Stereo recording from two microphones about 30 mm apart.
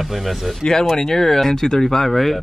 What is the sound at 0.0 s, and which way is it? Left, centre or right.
Speech, centre.